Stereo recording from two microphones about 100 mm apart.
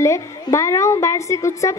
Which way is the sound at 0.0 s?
30° left (ahead or behind).